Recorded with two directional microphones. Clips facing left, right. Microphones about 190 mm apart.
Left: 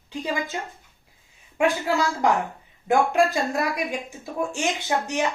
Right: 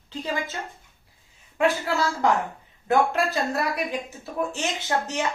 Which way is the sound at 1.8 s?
15° left (ahead or behind).